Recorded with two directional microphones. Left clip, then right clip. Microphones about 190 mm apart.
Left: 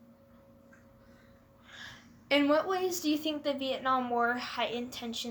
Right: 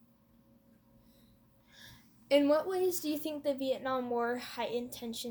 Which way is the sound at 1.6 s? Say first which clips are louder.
Left 9 dB; 35° right (ahead or behind).